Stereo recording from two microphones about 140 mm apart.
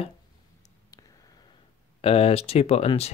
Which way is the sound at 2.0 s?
45° left (ahead or behind).